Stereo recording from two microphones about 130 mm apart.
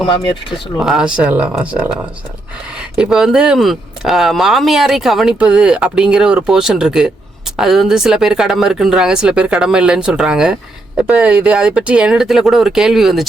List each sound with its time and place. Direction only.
0.8 s speech: 5° right (ahead or behind)
3.0 s speech: 5° right (ahead or behind)